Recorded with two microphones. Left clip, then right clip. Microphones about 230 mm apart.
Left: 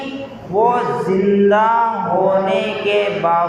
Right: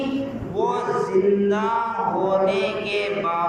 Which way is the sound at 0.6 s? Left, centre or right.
Left.